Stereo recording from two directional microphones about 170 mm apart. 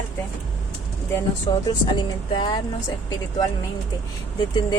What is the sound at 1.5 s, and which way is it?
Speech, 30° left (ahead or behind).